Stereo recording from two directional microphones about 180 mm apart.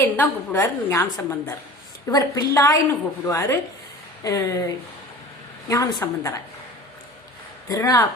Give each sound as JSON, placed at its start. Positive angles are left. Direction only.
{"t": 0.0, "sound": "a woman's voice", "side_deg": 15}
{"t": 7.7, "sound": "a woman's voice", "side_deg": 20}